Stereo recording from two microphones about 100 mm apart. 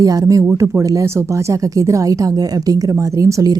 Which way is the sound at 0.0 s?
35° right (ahead or behind).